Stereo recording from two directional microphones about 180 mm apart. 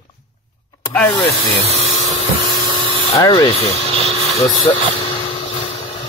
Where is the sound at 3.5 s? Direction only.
35° left (ahead or behind).